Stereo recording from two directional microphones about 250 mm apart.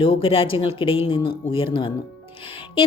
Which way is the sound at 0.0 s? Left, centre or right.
Left.